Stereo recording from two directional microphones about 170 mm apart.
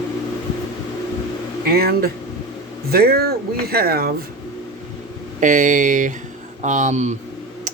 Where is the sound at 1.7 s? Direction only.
60° right (ahead or behind).